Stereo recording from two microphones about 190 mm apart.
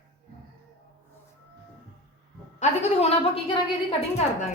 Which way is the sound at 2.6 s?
35° left (ahead or behind).